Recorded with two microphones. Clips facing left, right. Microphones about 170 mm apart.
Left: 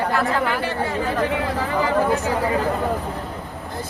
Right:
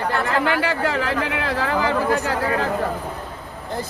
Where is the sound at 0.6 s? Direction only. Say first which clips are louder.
Right 1 dB; 90° right.